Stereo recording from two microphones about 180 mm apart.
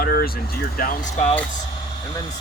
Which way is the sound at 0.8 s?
45° left (ahead or behind).